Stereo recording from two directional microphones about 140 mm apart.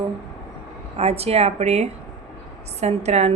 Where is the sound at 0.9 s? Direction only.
45° right (ahead or behind).